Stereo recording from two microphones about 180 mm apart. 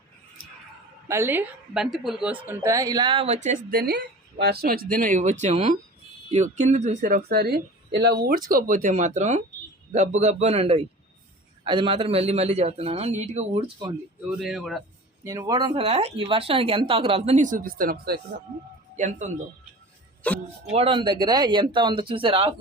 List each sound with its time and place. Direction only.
1.0 s a woman's voice: 15° right (ahead or behind); by 13.9 s 30° right (ahead or behind)
14.3 s speech: centre (ahead or behind)
15.2 s a woman's voice: 20° right (ahead or behind); by 18.2 s 60° right (ahead or behind)
18.9 s speech: 40° right (ahead or behind)
20.2 s speech: 10° left (ahead or behind)
20.7 s speech: 30° right (ahead or behind)